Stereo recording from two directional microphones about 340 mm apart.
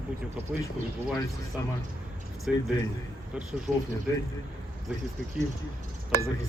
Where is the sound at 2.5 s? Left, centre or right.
Centre.